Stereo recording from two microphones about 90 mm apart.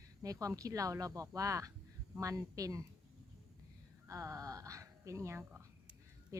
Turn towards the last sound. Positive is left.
turn(degrees=-35)  # may be behind; listen again after turning